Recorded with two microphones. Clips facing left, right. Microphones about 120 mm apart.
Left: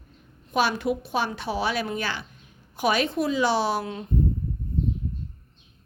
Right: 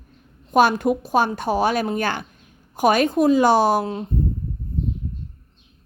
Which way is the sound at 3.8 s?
30° right (ahead or behind).